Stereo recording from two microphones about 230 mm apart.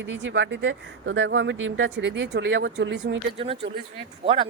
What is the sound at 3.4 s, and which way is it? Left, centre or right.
Speech, right.